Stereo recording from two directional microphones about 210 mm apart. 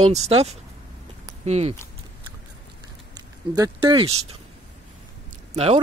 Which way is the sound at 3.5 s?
20° right (ahead or behind).